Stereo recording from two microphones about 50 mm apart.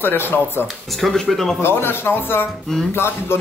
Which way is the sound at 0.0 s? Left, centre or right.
Left.